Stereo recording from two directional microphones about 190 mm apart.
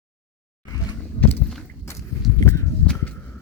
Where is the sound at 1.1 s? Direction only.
10° left (ahead or behind).